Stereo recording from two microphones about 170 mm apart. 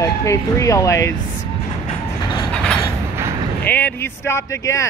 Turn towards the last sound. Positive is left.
turn(degrees=20)  # may be behind; listen again after turning